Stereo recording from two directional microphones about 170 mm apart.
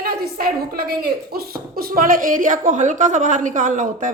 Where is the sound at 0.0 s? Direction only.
60° right (ahead or behind).